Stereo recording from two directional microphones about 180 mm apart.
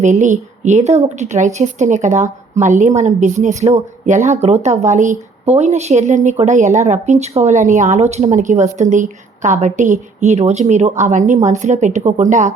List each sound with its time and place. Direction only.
0.0 s a woman's voice: 45° right (ahead or behind)